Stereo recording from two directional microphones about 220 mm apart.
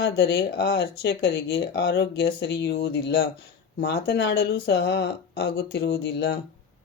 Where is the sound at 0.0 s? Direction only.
50° left (ahead or behind).